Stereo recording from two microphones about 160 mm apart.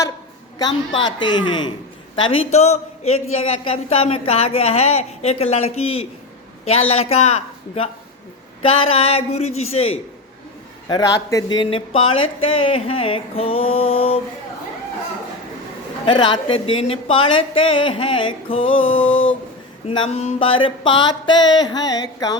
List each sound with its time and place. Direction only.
1.2 s mantra: 30° left (ahead or behind)
2.2 s a woman's voice: 40° left (ahead or behind)
10.8 s a woman's voice: 25° left (ahead or behind)
16.0 s a woman's voice: 30° left (ahead or behind)
20.1 s mantra: 45° left (ahead or behind); by 22.4 s 25° left (ahead or behind)